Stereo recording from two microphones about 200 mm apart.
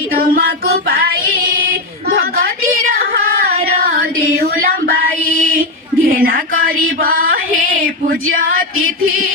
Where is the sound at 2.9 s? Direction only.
45° right (ahead or behind).